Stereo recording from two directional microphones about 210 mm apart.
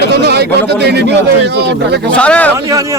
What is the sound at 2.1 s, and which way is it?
Speech, 5° left (ahead or behind).